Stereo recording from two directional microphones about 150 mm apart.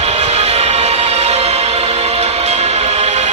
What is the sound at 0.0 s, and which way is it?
Music, 45° right (ahead or behind).